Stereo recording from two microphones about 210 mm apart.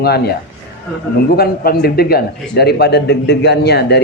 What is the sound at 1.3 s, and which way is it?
A man's voice, 45° left (ahead or behind).